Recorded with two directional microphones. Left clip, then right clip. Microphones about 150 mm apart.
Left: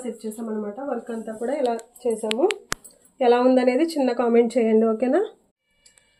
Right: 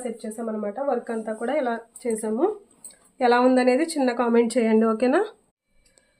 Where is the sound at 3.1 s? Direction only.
35° right (ahead or behind).